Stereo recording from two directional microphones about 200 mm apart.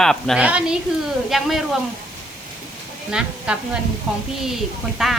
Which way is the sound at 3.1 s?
5° right (ahead or behind).